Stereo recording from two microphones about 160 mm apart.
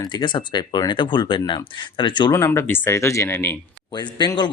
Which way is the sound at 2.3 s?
15° left (ahead or behind).